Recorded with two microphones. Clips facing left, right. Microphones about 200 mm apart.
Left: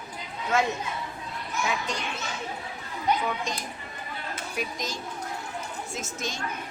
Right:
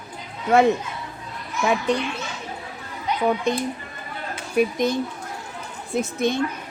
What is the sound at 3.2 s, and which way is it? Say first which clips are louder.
A child's voice: right 10 dB; 60° right (ahead or behind).